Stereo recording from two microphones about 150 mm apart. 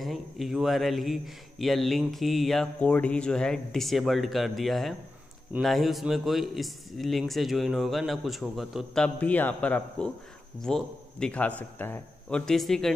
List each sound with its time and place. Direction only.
0.0 s a man's voice: centre (ahead or behind)